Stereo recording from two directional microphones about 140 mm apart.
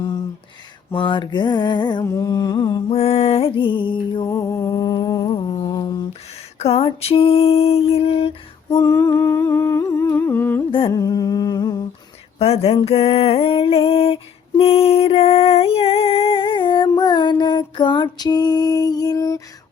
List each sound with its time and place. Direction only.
0.9 s mantra: 35° left (ahead or behind)
2.9 s mantra: 50° left (ahead or behind)
4.3 s music: 20° left (ahead or behind)
6.6 s a sound: 45° left (ahead or behind)
8.8 s humming: 20° left (ahead or behind)
10.7 s humming: 40° left (ahead or behind)
10.9 s humming: 25° left (ahead or behind)
12.4 s a sound: 45° left (ahead or behind); by 19.4 s 25° left (ahead or behind)